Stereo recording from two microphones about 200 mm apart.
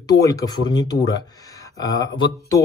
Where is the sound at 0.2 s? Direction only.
15° left (ahead or behind).